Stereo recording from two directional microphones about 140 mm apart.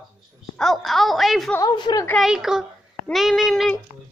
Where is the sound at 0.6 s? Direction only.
Centre (ahead or behind).